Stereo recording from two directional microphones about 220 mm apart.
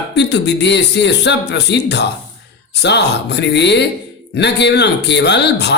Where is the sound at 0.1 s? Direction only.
50° left (ahead or behind).